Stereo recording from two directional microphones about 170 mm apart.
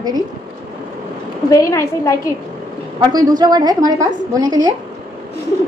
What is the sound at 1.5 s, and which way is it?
Speech, 20° left (ahead or behind).